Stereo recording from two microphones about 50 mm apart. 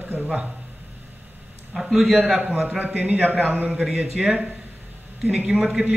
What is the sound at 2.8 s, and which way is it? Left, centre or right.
Speech, right.